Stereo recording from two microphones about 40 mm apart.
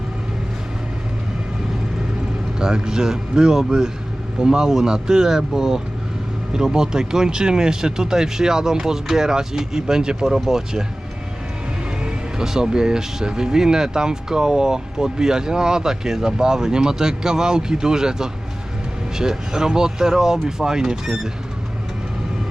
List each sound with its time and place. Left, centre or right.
2.6 s speech: centre
12.0 s speech: centre